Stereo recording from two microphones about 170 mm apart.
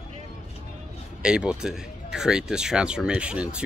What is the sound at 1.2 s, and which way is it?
Speech, 5° right (ahead or behind).